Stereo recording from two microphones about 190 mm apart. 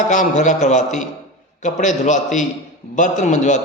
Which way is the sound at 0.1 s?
40° left (ahead or behind).